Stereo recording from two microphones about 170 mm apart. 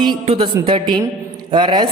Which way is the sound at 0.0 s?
30° right (ahead or behind).